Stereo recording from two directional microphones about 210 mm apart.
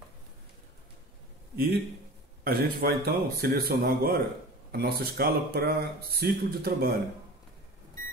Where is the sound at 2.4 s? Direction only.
45° right (ahead or behind).